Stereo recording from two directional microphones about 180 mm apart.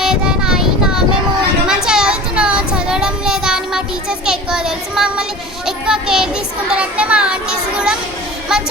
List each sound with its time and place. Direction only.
0.0 s a sound: 5° right (ahead or behind)
1.6 s child singing: 5° right (ahead or behind)
5.6 s children playing: 5° right (ahead or behind)
6.7 s speech: 5° right (ahead or behind)